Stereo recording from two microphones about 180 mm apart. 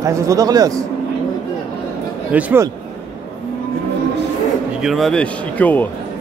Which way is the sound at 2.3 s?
10° right (ahead or behind).